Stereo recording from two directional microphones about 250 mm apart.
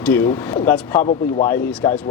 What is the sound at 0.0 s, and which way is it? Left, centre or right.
Speech, centre.